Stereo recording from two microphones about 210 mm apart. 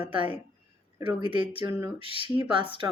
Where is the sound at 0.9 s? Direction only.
25° right (ahead or behind).